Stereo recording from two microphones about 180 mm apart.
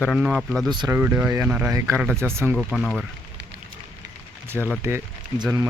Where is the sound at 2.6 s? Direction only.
Centre (ahead or behind).